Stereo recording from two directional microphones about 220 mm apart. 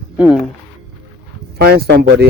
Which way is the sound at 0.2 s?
5° right (ahead or behind).